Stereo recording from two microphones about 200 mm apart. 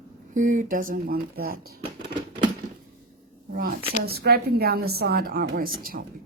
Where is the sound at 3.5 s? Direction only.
45° right (ahead or behind).